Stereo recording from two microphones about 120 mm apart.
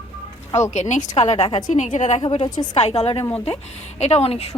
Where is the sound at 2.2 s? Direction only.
40° left (ahead or behind).